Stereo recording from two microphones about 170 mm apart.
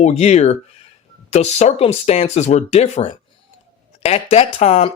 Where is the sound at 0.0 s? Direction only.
40° left (ahead or behind).